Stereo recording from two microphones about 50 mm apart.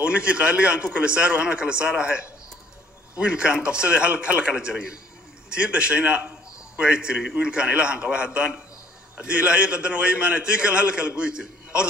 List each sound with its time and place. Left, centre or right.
0.0 s a man's voice: right